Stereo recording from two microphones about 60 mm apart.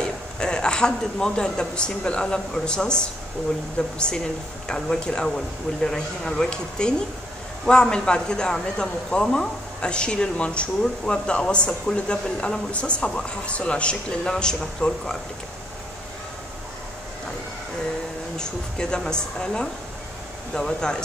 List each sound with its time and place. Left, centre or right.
0.0 s speech: centre
18.4 s speech: centre